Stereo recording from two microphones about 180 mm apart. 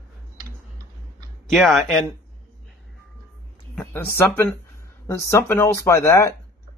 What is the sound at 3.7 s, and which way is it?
Speech, 5° left (ahead or behind).